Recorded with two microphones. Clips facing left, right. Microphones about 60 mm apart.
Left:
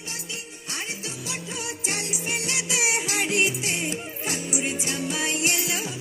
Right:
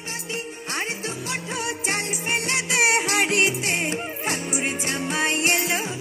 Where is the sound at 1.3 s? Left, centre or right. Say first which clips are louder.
Right 5 dB; right.